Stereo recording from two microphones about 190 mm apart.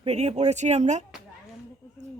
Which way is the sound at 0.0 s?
35° right (ahead or behind).